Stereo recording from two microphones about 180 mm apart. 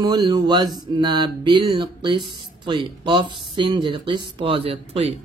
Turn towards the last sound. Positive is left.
turn(degrees=-30)  # may be behind; listen again after turning